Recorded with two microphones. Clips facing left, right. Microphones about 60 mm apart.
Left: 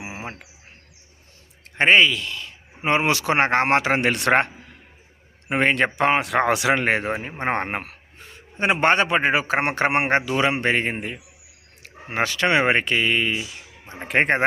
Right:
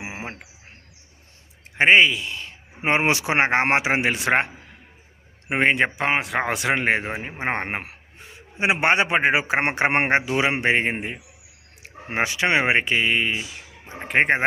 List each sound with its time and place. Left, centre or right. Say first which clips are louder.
0.0 s bird: right 1 dB; right
1.7 s speech: right 1 dB; centre
4.1 s speech: left 2 dB; centre
5.5 s speech: even; centre
6.0 s a man's voice: left 3 dB; centre